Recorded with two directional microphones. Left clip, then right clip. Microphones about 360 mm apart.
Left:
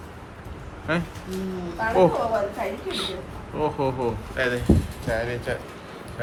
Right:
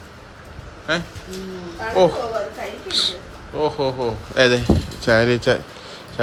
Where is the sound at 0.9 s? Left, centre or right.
Centre.